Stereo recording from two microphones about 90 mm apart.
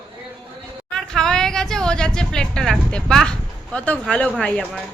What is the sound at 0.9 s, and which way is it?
Speech, 5° left (ahead or behind).